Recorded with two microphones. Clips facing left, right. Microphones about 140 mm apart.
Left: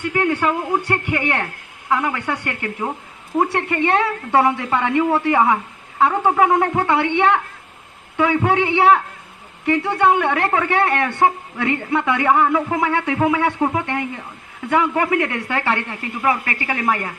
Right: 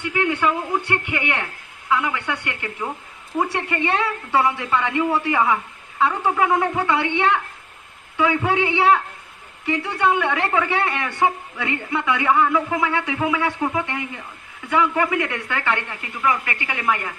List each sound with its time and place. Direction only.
0.1 s a man's voice: 40° left (ahead or behind)
13.6 s speech: 35° left (ahead or behind)
15.0 s speech: 30° left (ahead or behind)